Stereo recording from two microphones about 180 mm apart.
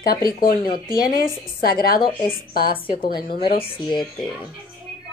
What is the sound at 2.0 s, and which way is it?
A woman's voice, 30° left (ahead or behind).